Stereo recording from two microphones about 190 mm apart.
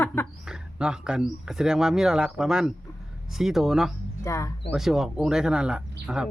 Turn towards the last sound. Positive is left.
turn(degrees=-5)  # may be behind; listen again after turning